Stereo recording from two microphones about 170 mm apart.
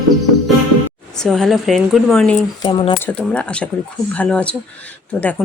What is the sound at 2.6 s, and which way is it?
Speech, 25° left (ahead or behind).